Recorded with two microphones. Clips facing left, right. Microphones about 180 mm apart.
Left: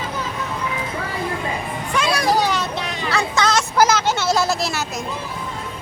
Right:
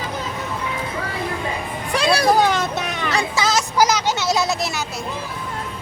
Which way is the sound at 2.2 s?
50° right (ahead or behind).